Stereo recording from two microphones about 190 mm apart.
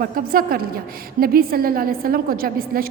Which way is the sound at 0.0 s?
50° right (ahead or behind).